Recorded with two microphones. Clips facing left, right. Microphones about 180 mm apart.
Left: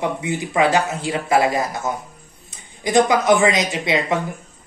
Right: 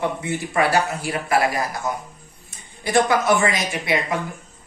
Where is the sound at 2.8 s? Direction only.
15° left (ahead or behind).